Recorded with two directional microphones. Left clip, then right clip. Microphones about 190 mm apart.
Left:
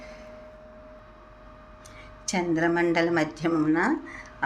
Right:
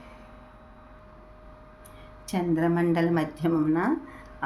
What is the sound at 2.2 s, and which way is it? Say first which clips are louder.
Speech: left 1 dB; 15° right (ahead or behind).